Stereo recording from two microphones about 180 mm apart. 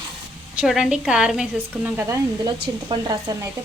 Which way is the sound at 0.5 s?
5° right (ahead or behind).